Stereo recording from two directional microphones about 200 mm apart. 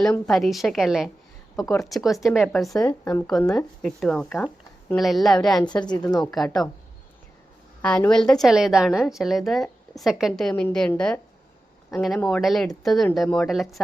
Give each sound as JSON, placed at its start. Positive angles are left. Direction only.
{"t": 0.0, "sound": "a woman's voice", "side_deg": 0}
{"t": 1.5, "sound": "speech", "side_deg": 15}
{"t": 1.8, "sound": "a woman's voice", "side_deg": 0}
{"t": 2.8, "sound": "speech", "side_deg": 15}
{"t": 3.5, "sound": "a woman's voice", "side_deg": 0}
{"t": 5.6, "sound": "a woman's voice", "side_deg": 20}
{"t": 6.3, "sound": "a woman's voice", "side_deg": 0}
{"t": 7.8, "sound": "a woman's voice", "side_deg": 5}